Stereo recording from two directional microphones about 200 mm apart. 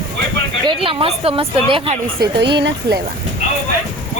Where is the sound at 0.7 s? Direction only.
25° right (ahead or behind).